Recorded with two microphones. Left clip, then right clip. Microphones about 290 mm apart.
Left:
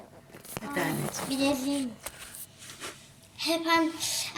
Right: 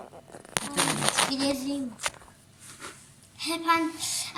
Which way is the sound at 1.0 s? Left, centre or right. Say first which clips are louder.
Right 10 dB; right.